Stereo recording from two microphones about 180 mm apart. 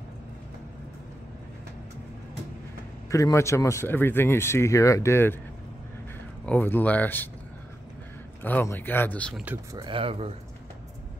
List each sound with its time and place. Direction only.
3.1 s speech: 20° left (ahead or behind)
6.4 s speech: 10° left (ahead or behind)
8.4 s speech: 10° left (ahead or behind)
9.4 s speech: 10° right (ahead or behind)
9.8 s speech: 30° right (ahead or behind)